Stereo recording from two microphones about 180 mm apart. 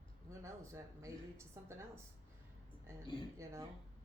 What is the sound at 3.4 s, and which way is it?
Speech, 15° right (ahead or behind).